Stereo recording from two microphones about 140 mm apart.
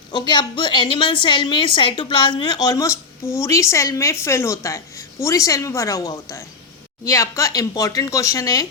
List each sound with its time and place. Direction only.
0.1 s a woman's voice: 30° left (ahead or behind)